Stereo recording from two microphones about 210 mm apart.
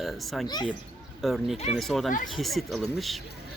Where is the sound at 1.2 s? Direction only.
Centre (ahead or behind).